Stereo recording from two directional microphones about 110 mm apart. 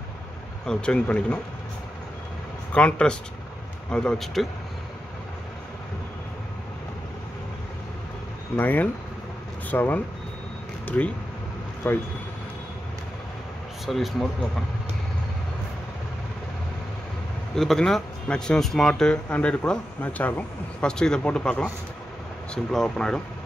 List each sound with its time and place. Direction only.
0.7 s speech: 10° left (ahead or behind)
2.7 s speech: 10° left (ahead or behind)
8.5 s speech: 15° left (ahead or behind)
13.8 s speech: centre (ahead or behind)
17.6 s speech: 5° left (ahead or behind)